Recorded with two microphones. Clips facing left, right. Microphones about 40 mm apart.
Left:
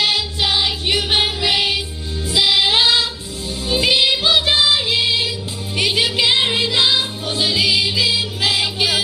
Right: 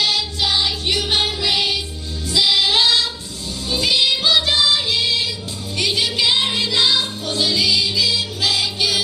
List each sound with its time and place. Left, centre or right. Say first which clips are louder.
0.0 s music: left 1 dB; left
2.3 s female singing: left 1 dB; left
3.7 s music: left 2 dB; left